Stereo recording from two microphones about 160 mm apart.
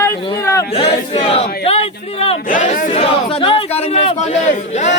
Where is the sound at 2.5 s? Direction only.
55° left (ahead or behind).